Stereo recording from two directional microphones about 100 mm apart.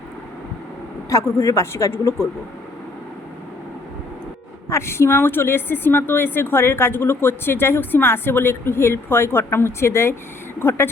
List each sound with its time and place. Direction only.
1.1 s speech: 30° left (ahead or behind)
4.7 s speech: 25° left (ahead or behind)